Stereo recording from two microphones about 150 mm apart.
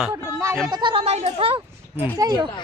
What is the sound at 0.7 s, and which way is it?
Speech, 35° right (ahead or behind).